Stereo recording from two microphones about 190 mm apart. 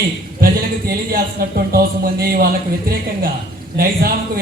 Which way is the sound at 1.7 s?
50° right (ahead or behind).